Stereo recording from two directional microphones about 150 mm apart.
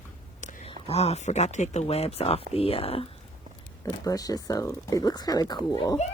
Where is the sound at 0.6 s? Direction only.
40° left (ahead or behind).